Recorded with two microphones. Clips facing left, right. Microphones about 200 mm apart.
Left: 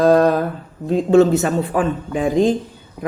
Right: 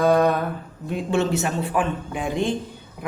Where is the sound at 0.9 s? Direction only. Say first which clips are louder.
Left 10 dB; 35° left (ahead or behind).